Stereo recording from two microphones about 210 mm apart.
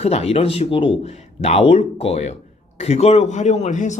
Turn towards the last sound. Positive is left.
turn(degrees=35)  # may be behind; listen again after turning